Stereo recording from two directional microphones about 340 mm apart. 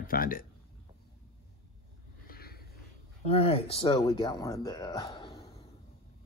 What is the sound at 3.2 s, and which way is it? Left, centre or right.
Speech, centre.